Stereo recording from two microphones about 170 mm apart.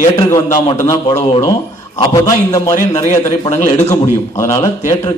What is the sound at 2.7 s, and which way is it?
Speech, 45° left (ahead or behind).